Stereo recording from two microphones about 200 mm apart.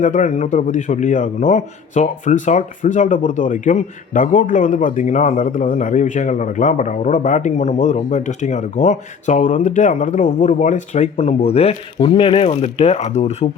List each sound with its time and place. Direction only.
0.0 s a man's voice: 40° left (ahead or behind)